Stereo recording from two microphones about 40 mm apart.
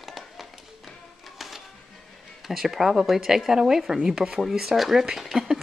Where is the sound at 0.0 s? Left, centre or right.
Centre.